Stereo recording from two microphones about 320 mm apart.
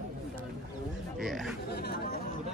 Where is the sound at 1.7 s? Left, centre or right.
Left.